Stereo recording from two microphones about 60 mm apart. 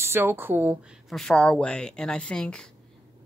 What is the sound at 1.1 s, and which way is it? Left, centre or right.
Speech, centre.